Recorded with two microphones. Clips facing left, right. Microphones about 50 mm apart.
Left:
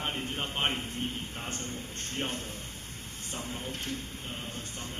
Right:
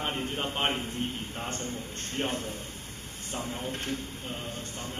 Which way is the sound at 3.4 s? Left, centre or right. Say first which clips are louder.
Right 4 dB; right.